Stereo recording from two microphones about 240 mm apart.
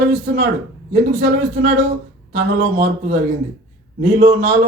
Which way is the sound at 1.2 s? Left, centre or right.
Right.